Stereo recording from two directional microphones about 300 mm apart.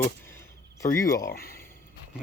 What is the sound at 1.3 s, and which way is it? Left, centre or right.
Speech, left.